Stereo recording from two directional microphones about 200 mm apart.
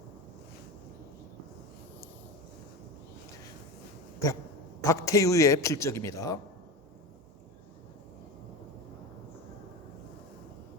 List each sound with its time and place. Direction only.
4.2 s a man's voice: 15° left (ahead or behind)